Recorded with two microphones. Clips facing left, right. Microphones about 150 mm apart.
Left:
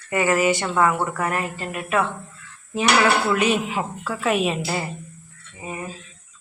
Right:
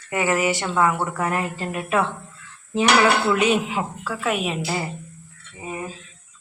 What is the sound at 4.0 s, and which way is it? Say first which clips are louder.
Speech: left 5 dB; centre (ahead or behind).